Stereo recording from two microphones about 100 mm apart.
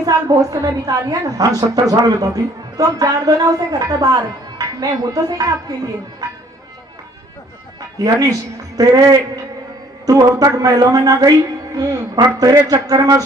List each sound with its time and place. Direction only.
0.6 s a woman's voice: 35° right (ahead or behind)
7.9 s a woman's voice: 40° right (ahead or behind)